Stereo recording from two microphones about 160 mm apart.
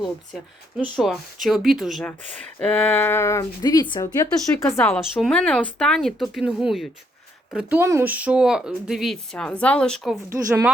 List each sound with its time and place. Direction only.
0.9 s speech: centre (ahead or behind); by 4.3 s 25° left (ahead or behind)
4.5 s speech: 10° left (ahead or behind)
4.9 s speech: 5° right (ahead or behind)
5.3 s speech: 5° left (ahead or behind)
10.2 s speech: 15° right (ahead or behind)